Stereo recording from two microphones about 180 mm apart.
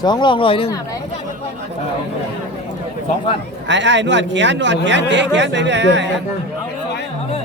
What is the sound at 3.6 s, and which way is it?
A man's voice, 85° right.